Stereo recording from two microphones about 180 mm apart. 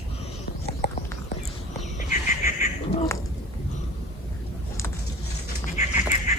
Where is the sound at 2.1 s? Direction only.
45° left (ahead or behind).